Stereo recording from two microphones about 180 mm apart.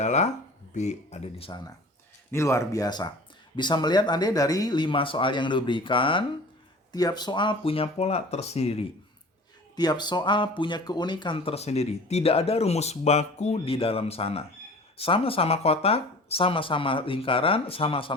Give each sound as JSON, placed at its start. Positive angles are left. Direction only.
{"t": 0.0, "sound": "speech", "side_deg": 40}
{"t": 2.3, "sound": "speech", "side_deg": 15}
{"t": 9.7, "sound": "speech", "side_deg": 20}